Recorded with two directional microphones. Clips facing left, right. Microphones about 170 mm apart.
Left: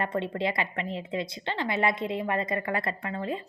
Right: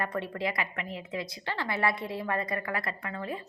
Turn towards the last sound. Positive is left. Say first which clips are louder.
# left 4 dB
turn(degrees=25)  # may be behind; listen again after turning